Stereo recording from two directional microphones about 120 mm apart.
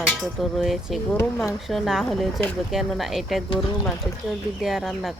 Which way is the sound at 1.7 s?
Centre (ahead or behind).